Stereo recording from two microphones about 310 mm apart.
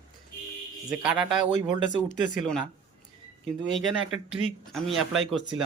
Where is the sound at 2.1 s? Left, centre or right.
Left.